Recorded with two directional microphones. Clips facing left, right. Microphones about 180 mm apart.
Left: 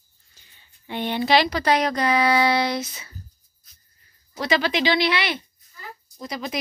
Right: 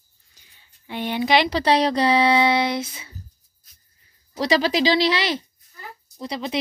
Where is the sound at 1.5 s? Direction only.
30° right (ahead or behind).